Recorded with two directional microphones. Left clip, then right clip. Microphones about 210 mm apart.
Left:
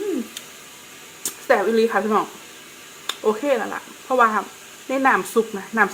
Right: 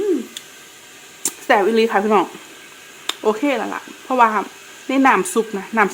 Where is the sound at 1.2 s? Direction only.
40° right (ahead or behind).